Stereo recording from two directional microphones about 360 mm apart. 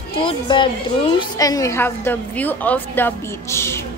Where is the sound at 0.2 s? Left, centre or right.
Centre.